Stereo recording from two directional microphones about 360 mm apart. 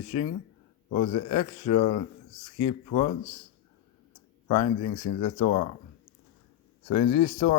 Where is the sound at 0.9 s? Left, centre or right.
Centre.